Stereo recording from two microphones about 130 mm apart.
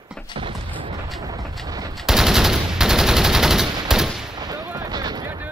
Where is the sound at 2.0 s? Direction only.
5° right (ahead or behind).